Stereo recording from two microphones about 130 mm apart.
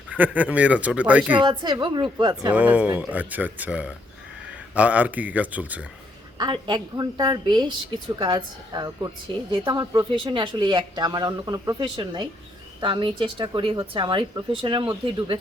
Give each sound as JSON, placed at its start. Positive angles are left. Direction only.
{"t": 0.2, "sound": "speech", "side_deg": -10}
{"t": 1.5, "sound": "a woman's voice", "side_deg": -35}
{"t": 2.5, "sound": "speech", "side_deg": -10}
{"t": 6.3, "sound": "a woman's voice", "side_deg": -35}